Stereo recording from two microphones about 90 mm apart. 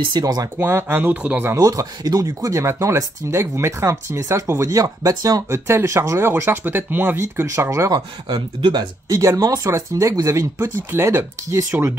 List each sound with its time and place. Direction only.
0.2 s speech: 40° right (ahead or behind)
0.6 s speech: 25° right (ahead or behind)
1.5 s speech: 35° right (ahead or behind)
5.7 s speech: 30° right (ahead or behind)
7.9 s speech: 60° right (ahead or behind)
9.1 s speech: 35° right (ahead or behind)